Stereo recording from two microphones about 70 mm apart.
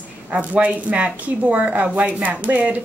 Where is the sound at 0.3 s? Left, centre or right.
Right.